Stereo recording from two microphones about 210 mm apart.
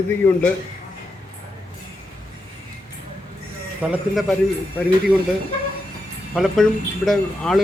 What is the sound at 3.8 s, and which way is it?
Speech, 5° right (ahead or behind).